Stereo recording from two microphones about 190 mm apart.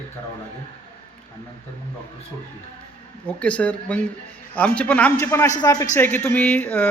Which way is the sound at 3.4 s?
5° left (ahead or behind).